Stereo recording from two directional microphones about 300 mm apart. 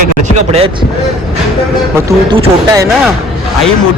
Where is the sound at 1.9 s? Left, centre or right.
Centre.